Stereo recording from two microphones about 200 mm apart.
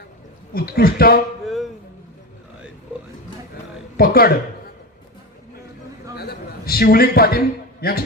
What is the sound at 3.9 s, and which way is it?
Speech, 50° left (ahead or behind).